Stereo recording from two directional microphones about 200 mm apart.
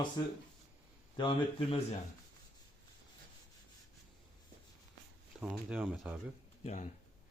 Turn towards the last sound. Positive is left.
turn(degrees=35)  # may be behind; listen again after turning